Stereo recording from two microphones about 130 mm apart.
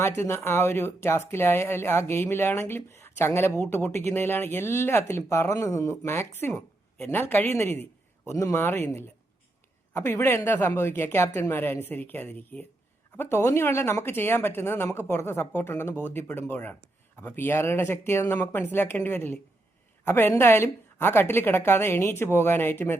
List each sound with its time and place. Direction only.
0.2 s speech: 20° left (ahead or behind)